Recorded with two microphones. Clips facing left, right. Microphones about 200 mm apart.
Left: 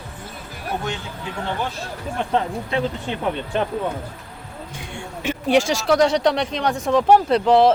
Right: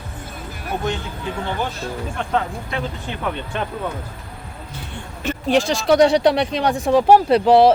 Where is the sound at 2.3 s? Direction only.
25° left (ahead or behind).